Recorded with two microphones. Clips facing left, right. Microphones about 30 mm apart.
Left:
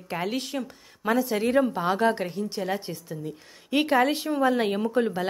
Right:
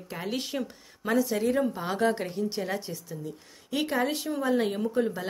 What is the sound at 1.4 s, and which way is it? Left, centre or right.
Speech, left.